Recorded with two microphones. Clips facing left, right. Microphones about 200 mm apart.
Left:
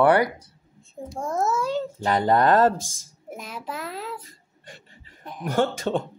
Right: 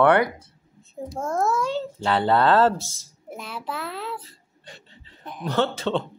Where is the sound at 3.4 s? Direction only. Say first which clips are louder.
Right 2 dB; 40° left (ahead or behind).